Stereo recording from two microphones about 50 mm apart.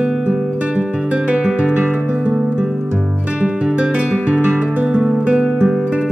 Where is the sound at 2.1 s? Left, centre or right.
Right.